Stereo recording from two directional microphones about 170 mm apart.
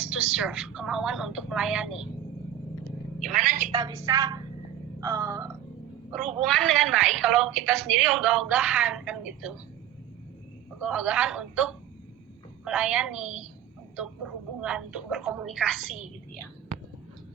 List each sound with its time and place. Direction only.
0.0 s a woman's voice: 5° right (ahead or behind)
3.2 s a man's voice: centre (ahead or behind)
3.4 s a woman's voice: 50° right (ahead or behind)
3.7 s a woman's voice: 25° right (ahead or behind)
6.4 s a woman's voice: 5° left (ahead or behind)
10.8 s a woman's voice: 5° right (ahead or behind)
14.6 s a woman's voice: 5° right (ahead or behind)